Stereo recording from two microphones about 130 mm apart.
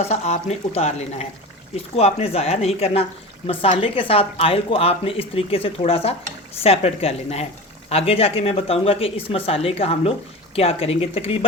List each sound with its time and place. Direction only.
0.0 s speech: 55° left (ahead or behind)